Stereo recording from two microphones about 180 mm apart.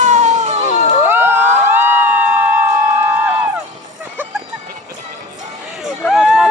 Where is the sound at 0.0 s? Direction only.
40° right (ahead or behind).